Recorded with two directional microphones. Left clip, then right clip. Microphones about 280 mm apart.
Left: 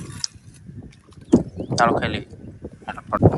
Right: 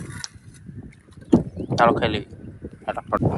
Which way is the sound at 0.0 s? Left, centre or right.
Centre.